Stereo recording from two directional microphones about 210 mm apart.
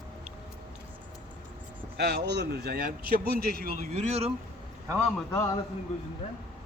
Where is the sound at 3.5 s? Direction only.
45° left (ahead or behind).